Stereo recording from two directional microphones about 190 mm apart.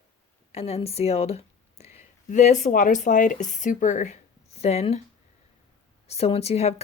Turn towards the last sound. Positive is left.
turn(degrees=35)  # may be behind; listen again after turning